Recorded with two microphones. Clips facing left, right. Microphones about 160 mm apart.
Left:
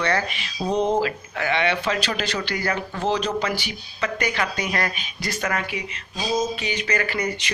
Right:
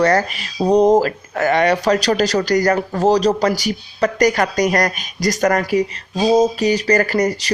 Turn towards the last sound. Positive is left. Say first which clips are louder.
# right 9 dB
turn(degrees=-40)  # may be behind; listen again after turning